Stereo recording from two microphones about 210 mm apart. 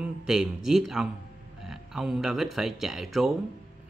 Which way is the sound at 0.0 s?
Centre (ahead or behind).